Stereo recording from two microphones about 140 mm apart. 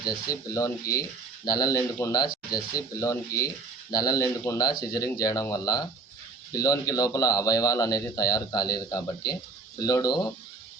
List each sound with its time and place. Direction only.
0.0 s speech: 25° left (ahead or behind)